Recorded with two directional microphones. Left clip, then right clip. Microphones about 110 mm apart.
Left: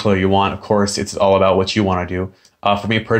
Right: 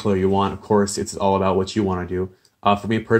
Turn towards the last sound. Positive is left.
turn(degrees=-45)  # may be behind; listen again after turning